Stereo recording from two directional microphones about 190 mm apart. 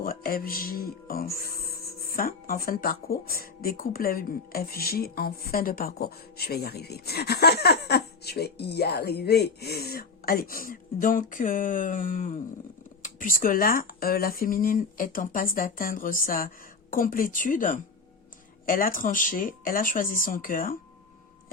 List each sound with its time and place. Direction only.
0.0 s speech: 50° left (ahead or behind)